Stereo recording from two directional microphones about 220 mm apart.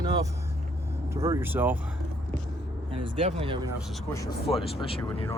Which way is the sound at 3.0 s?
25° right (ahead or behind).